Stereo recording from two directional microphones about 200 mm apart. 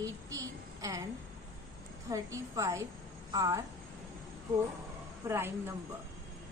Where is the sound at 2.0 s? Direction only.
15° right (ahead or behind).